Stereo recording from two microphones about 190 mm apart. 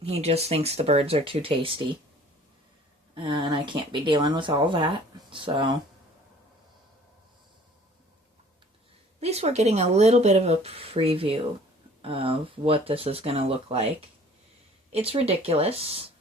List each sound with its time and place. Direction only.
0.0 s speech: 35° right (ahead or behind)
3.2 s speech: 25° right (ahead or behind)
9.2 s speech: 35° right (ahead or behind)
14.9 s speech: 30° right (ahead or behind)